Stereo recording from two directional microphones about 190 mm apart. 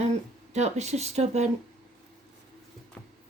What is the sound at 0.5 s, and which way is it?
Speech, 35° right (ahead or behind).